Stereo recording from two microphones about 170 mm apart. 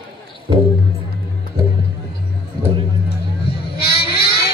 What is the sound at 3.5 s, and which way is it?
Vehicle, 70° left (ahead or behind).